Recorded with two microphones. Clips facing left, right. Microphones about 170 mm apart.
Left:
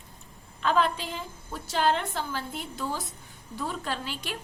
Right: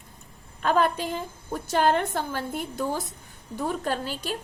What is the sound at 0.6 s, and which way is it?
A woman's voice, 50° right (ahead or behind).